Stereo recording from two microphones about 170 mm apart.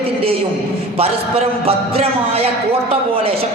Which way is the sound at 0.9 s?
35° right (ahead or behind).